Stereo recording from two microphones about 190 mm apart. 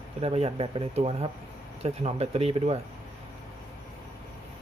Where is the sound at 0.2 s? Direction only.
35° right (ahead or behind).